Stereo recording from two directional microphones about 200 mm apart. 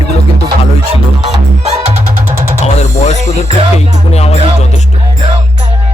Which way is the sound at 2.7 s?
35° left (ahead or behind).